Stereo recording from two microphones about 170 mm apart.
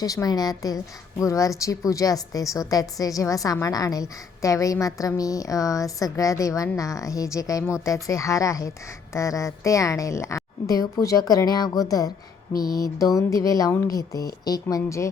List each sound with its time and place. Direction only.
0.0 s a woman's voice: 20° left (ahead or behind)